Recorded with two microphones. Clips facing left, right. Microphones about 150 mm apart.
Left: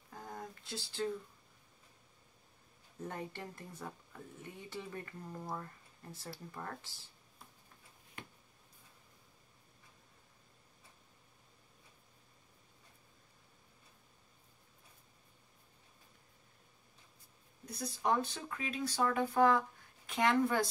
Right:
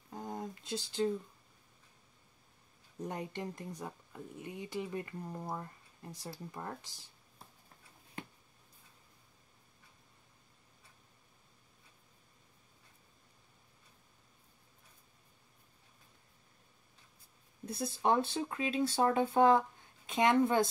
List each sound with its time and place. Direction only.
0.1 s a sound: 20° right (ahead or behind)
3.0 s speech: 15° right (ahead or behind)
17.6 s speech: 25° right (ahead or behind)